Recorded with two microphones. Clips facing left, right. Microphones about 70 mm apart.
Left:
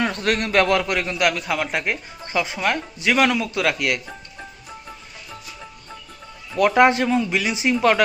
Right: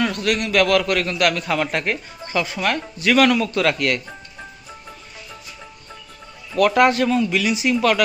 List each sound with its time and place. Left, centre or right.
0.0 s a man's voice: left; by 4.1 s centre
6.6 s a man's voice: left